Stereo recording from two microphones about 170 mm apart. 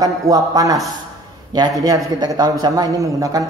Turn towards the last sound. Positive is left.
turn(degrees=-20)  # may be behind; listen again after turning